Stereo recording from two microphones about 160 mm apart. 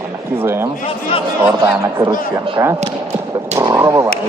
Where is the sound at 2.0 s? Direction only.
20° right (ahead or behind).